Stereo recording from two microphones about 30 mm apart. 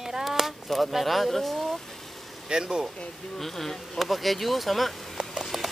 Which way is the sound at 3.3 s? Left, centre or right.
Centre.